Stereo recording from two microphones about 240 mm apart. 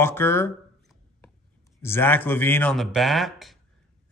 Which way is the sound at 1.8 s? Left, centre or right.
Centre.